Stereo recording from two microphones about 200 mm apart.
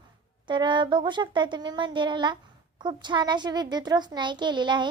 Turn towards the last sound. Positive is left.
turn(degrees=-20)  # may be behind; listen again after turning